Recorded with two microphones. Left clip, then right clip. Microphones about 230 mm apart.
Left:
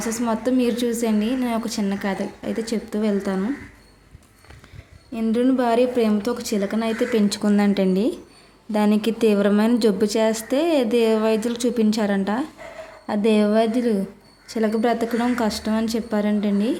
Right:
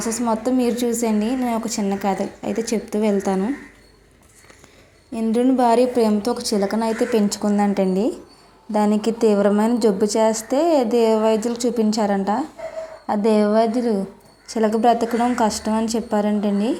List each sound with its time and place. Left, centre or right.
0.0 s a woman's voice: centre
5.1 s a woman's voice: centre
13.1 s a woman's voice: left
14.5 s a woman's voice: centre